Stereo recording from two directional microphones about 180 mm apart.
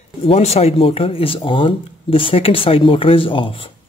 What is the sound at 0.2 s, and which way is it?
Speech, 35° left (ahead or behind).